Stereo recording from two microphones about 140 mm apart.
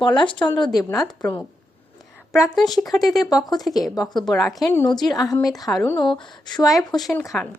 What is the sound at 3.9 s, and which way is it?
Speech, 30° left (ahead or behind).